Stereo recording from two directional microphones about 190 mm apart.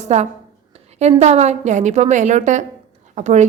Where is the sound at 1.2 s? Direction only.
35° right (ahead or behind).